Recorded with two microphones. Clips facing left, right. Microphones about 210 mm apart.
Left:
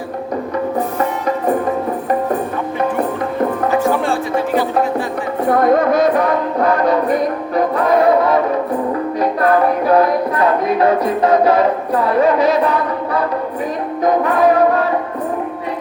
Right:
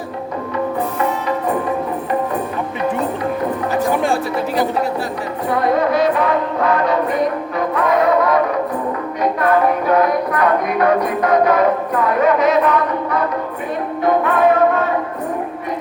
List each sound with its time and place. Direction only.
5.5 s music: 50° left (ahead or behind); by 8.4 s 30° left (ahead or behind)
9.4 s music: 35° left (ahead or behind)
12.0 s a sound: 30° left (ahead or behind)